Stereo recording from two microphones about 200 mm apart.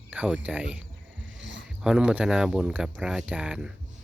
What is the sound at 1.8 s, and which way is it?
Speech, 5° right (ahead or behind).